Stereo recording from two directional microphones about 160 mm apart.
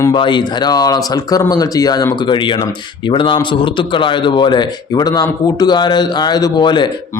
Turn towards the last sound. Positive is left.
turn(degrees=30)  # may be behind; listen again after turning